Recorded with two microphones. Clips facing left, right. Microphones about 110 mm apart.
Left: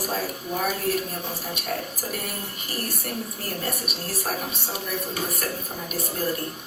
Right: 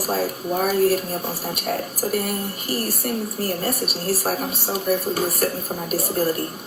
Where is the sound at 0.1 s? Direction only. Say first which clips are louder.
Right 6 dB; 40° right (ahead or behind).